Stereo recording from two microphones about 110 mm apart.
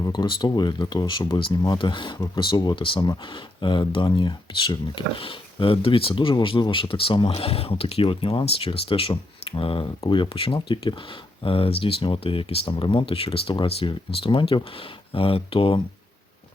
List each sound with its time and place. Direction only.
0.0 s speech: 40° left (ahead or behind)